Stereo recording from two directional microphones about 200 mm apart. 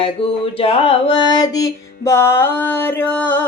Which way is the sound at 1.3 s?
15° left (ahead or behind).